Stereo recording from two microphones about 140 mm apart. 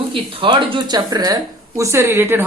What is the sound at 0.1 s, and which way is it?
Speech, 35° right (ahead or behind).